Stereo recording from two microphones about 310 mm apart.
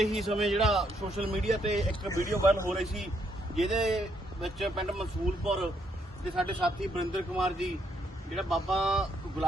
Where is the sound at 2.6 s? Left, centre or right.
Centre.